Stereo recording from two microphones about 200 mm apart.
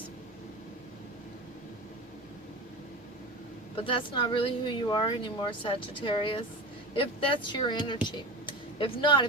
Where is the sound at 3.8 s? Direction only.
25° left (ahead or behind).